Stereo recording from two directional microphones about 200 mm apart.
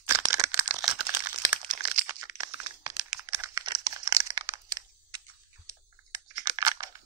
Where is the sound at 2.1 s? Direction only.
15° right (ahead or behind).